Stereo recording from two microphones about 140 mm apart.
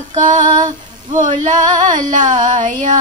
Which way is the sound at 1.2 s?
65° right (ahead or behind).